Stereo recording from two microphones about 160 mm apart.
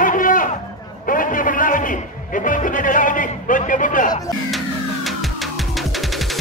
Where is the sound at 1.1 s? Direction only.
55° left (ahead or behind).